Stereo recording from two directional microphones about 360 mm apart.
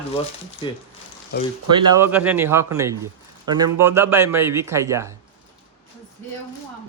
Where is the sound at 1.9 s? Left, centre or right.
Centre.